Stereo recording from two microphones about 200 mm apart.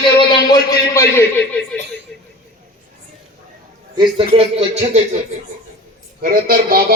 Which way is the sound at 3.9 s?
30° right (ahead or behind).